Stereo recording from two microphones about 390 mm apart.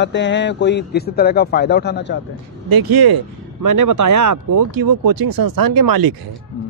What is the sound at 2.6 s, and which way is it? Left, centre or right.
Speech, right.